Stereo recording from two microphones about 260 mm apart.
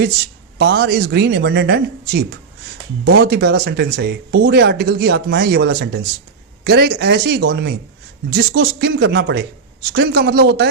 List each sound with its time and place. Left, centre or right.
0.6 s speech: right